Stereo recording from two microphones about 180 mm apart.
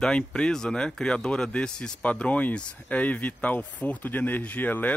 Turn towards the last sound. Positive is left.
turn(degrees=10)  # may be behind; listen again after turning